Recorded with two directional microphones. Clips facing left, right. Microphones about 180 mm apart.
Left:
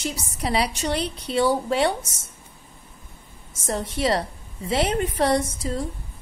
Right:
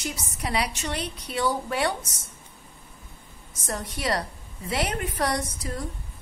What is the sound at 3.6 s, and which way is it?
A woman's voice, 25° left (ahead or behind).